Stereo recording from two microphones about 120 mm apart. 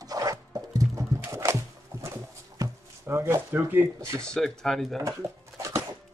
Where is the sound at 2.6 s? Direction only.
20° right (ahead or behind).